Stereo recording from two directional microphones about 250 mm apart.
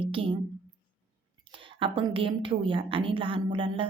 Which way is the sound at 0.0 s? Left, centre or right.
Right.